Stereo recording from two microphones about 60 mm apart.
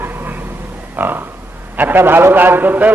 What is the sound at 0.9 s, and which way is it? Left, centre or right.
A man's voice, right.